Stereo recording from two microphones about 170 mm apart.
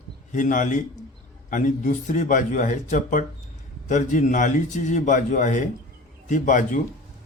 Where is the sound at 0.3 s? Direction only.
50° left (ahead or behind).